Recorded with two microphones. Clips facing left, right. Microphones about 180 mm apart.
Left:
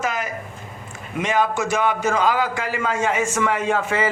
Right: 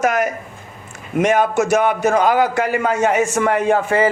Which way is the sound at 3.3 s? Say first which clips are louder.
Right 5 dB; 45° right (ahead or behind).